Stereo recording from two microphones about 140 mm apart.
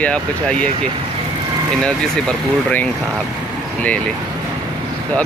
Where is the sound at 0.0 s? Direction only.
10° left (ahead or behind).